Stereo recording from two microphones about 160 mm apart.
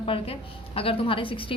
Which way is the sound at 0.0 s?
35° left (ahead or behind).